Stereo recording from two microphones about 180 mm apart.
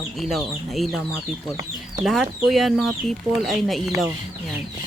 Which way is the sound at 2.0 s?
Centre (ahead or behind).